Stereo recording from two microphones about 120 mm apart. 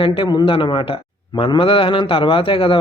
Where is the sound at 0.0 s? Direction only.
45° left (ahead or behind).